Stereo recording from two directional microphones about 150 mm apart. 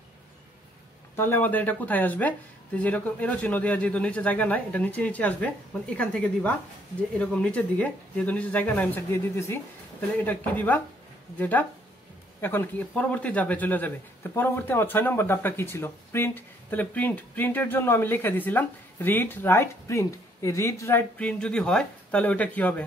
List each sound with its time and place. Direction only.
1.1 s speech: 15° left (ahead or behind)
21.2 s speech: 5° left (ahead or behind)